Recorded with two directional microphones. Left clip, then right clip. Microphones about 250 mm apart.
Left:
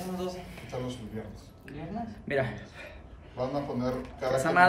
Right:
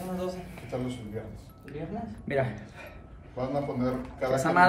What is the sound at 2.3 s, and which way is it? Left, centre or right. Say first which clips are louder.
Speech: right 1 dB; centre.